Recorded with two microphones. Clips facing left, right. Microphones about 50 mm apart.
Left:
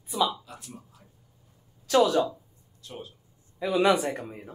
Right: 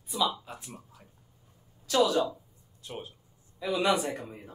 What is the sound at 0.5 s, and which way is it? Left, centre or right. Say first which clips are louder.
Speech: right 1 dB; right.